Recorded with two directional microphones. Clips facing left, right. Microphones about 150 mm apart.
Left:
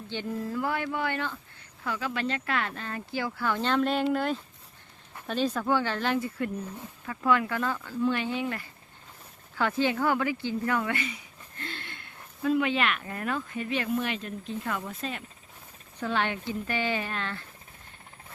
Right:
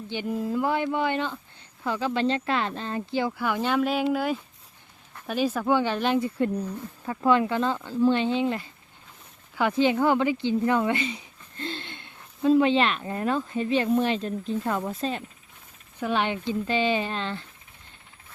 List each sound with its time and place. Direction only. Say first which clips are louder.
0.1 s speech: right 4 dB; 15° right (ahead or behind); by 15.2 s 30° right (ahead or behind)
16.0 s speech: right 3 dB; 15° right (ahead or behind)